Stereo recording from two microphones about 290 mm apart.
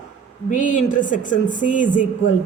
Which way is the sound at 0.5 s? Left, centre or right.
Left.